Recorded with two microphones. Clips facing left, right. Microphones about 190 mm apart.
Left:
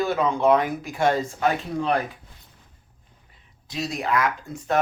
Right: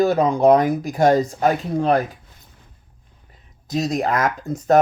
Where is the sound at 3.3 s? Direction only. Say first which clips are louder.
Right 15 dB; 40° right (ahead or behind).